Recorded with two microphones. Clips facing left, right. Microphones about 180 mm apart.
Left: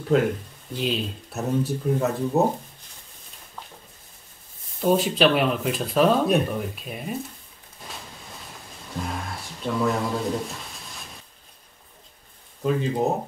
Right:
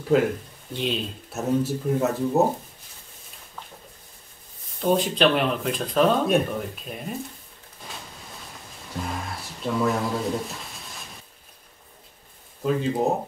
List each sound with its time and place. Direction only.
0.1 s speech: 5° right (ahead or behind)
4.7 s speech: 5° left (ahead or behind)
8.9 s speech: centre (ahead or behind)
12.6 s speech: centre (ahead or behind)